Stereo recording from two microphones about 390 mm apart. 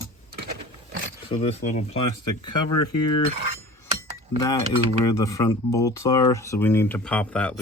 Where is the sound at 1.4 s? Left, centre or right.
Centre.